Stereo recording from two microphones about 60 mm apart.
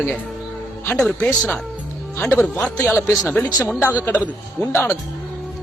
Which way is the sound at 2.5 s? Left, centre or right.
Centre.